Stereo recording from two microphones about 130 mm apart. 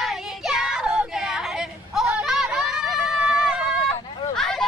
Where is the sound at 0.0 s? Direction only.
Centre (ahead or behind).